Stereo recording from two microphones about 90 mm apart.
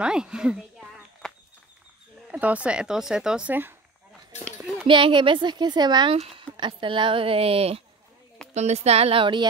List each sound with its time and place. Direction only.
0.0 s speech: 10° right (ahead or behind)
1.2 s a sound: 5° left (ahead or behind)
2.3 s speech: 15° right (ahead or behind)
4.8 s speech: 70° right (ahead or behind); by 6.1 s 55° right (ahead or behind)
6.2 s speech: 65° right (ahead or behind); by 7.8 s 90° right
8.4 s a sound: 5° left (ahead or behind)
9.0 s speech: 80° right; by 9.5 s 65° right (ahead or behind)